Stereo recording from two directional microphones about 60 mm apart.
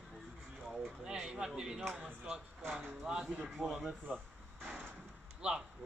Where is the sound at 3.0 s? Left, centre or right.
Centre.